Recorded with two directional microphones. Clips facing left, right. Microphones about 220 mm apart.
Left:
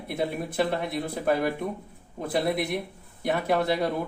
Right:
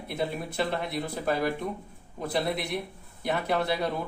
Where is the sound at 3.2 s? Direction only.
50° left (ahead or behind).